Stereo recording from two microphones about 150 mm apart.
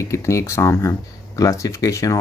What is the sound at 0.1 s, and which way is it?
Speech, 20° left (ahead or behind).